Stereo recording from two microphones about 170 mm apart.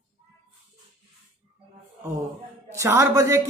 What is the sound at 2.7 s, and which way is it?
Speech, 15° right (ahead or behind).